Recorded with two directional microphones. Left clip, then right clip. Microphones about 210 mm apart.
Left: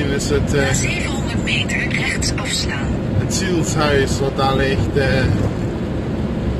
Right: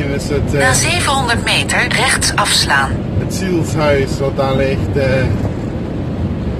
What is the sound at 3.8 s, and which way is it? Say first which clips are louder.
Speech: right 3 dB; 20° right (ahead or behind).